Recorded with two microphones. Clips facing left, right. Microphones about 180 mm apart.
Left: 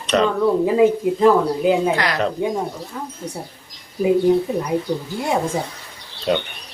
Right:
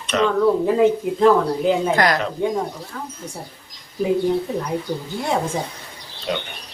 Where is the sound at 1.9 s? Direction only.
45° right (ahead or behind).